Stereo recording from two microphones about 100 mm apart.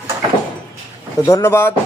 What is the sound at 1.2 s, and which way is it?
Speech, 30° left (ahead or behind).